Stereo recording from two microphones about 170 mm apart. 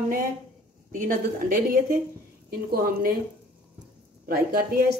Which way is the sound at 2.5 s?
60° right (ahead or behind).